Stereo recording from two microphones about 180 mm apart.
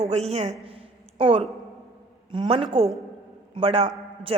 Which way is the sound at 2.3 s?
30° right (ahead or behind).